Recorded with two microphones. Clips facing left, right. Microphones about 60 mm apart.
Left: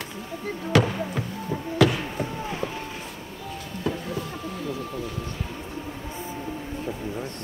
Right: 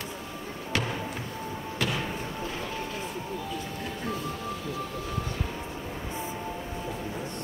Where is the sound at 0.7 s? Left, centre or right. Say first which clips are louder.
Left 10 dB; left.